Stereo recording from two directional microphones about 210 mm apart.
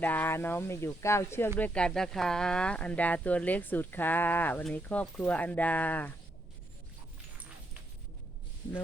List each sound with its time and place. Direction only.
0.0 s speech: 10° left (ahead or behind)